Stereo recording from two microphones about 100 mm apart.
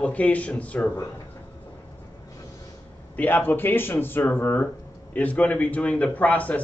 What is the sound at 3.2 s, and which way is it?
Speech, 20° left (ahead or behind).